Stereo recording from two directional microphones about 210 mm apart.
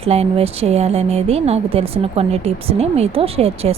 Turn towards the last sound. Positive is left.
turn(degrees=-30)  # may be behind; listen again after turning